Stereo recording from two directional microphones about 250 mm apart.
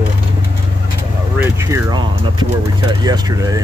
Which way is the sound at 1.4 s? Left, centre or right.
Centre.